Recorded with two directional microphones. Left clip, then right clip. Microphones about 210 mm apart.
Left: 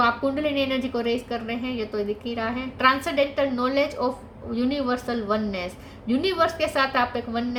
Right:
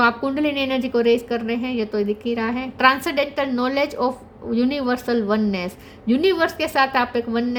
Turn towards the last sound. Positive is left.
turn(degrees=-45)  # may be behind; listen again after turning